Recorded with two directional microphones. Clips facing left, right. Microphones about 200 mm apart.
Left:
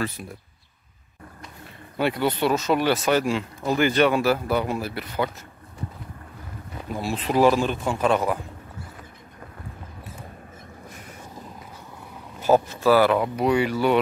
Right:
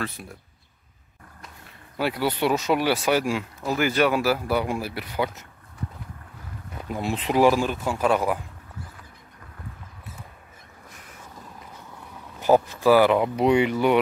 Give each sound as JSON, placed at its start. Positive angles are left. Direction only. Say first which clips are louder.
{"t": 0.2, "sound": "speech", "louder": "left 3 dB", "side_deg": 0}
{"t": 2.0, "sound": "speech", "louder": "left 2 dB", "side_deg": -5}
{"t": 6.9, "sound": "speech", "louder": "even", "side_deg": -20}
{"t": 12.4, "sound": "speech", "louder": "even", "side_deg": -15}